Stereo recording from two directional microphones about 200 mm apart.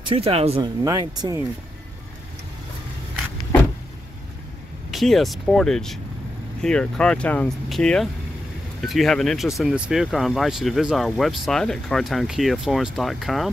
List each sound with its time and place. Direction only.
0.0 s speech: 25° right (ahead or behind)
0.8 s speech: 20° right (ahead or behind)
4.9 s speech: centre (ahead or behind)